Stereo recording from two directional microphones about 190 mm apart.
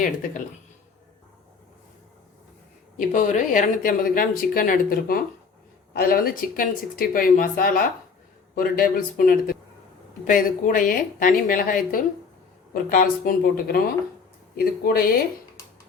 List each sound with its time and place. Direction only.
0.0 s speech: 45° left (ahead or behind)
3.1 s speech: 40° left (ahead or behind)